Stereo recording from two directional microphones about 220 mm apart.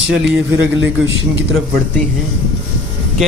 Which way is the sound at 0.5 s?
55° right (ahead or behind).